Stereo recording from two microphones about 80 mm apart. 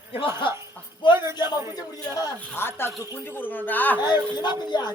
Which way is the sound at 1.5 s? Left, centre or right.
Right.